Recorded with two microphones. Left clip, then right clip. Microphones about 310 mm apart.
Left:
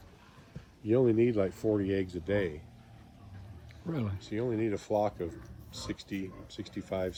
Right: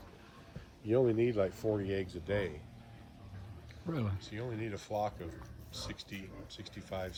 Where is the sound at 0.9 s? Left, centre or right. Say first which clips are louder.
Left 4 dB; left.